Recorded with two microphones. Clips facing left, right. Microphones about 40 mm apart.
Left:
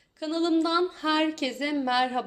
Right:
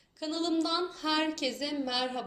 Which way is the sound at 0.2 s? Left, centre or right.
Centre.